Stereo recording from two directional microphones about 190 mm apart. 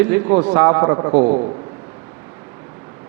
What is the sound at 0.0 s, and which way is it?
A man's voice, 10° right (ahead or behind).